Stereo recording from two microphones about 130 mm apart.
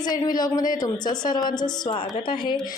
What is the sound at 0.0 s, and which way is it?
Speech, 30° left (ahead or behind).